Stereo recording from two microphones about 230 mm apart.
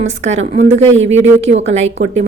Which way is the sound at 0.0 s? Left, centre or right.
Right.